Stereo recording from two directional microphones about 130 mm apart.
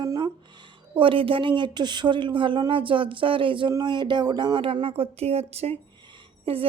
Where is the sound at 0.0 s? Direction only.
30° right (ahead or behind).